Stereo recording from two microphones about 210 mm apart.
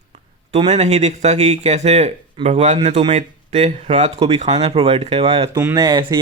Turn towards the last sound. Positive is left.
turn(degrees=-20)  # may be behind; listen again after turning